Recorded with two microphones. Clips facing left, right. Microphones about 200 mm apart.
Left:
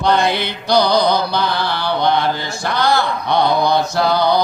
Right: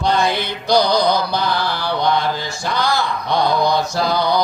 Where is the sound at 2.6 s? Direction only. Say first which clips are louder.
Left 3 dB; 60° left (ahead or behind).